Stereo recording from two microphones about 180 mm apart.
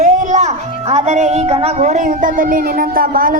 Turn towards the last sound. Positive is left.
turn(degrees=-55)  # may be behind; listen again after turning